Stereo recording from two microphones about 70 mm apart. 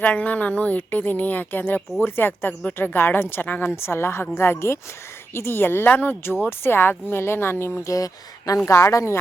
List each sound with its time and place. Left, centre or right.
0.0 s a woman's voice: centre
3.8 s speech: left
7.8 s speech: left